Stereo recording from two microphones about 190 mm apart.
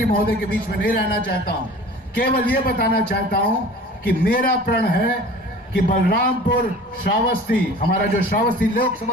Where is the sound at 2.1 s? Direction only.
50° left (ahead or behind).